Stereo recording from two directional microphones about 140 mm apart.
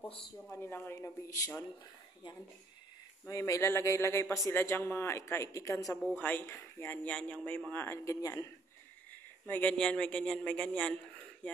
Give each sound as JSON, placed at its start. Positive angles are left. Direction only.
{"t": 0.5, "sound": "speech", "side_deg": 15}
{"t": 3.3, "sound": "a man's voice", "side_deg": 20}
{"t": 6.1, "sound": "speech", "side_deg": 10}
{"t": 9.1, "sound": "speech", "side_deg": 10}